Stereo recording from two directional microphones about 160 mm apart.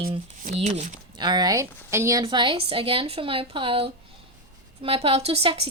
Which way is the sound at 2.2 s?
30° right (ahead or behind).